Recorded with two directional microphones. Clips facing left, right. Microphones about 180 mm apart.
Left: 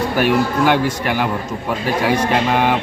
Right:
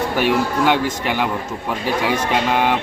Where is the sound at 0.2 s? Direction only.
10° left (ahead or behind).